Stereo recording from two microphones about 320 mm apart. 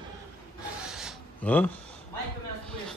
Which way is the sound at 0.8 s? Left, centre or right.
Centre.